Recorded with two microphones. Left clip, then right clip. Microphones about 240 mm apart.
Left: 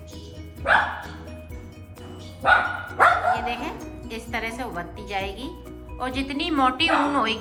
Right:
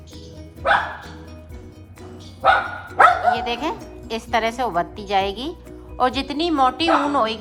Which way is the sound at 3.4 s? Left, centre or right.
Centre.